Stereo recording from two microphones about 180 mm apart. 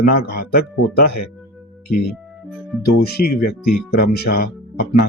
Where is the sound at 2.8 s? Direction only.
60° left (ahead or behind).